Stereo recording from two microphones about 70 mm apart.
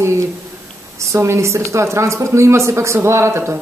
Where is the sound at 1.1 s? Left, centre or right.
Right.